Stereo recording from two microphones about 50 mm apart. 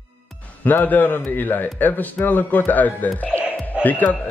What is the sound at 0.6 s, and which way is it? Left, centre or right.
A man's voice, left.